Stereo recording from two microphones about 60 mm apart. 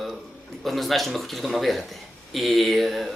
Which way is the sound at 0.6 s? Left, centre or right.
Centre.